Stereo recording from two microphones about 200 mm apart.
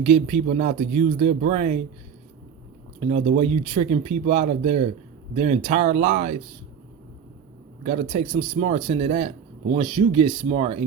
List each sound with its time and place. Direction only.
0.0 s speech: 35° right (ahead or behind)
3.0 s speech: 35° right (ahead or behind)
7.9 s speech: 30° right (ahead or behind)